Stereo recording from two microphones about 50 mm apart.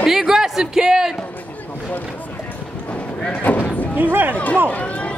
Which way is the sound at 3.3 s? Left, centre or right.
Left.